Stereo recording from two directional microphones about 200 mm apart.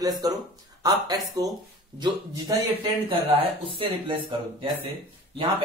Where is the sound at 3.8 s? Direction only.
25° right (ahead or behind).